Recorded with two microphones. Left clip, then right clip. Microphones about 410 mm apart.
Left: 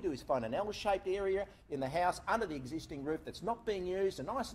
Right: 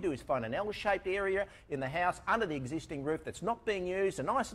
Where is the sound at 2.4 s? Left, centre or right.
Right.